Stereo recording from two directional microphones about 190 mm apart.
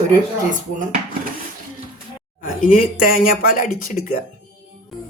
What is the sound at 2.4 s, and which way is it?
Speech, 45° left (ahead or behind).